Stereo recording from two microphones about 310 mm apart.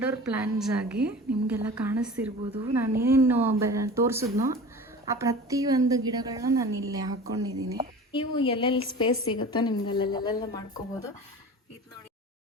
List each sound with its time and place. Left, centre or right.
0.0 s a woman's voice: centre
8.1 s speech: centre